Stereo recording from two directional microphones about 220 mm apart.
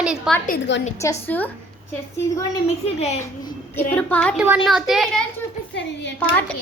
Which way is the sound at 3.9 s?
5° left (ahead or behind).